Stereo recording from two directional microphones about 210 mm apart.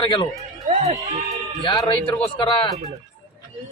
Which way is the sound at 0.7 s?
30° right (ahead or behind).